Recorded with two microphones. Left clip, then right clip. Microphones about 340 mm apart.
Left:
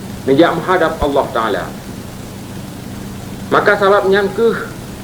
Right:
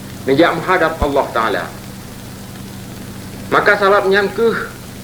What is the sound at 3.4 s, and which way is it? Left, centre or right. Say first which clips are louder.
A man's voice: left 1 dB; left.